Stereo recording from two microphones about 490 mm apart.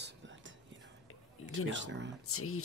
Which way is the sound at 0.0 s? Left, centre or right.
Right.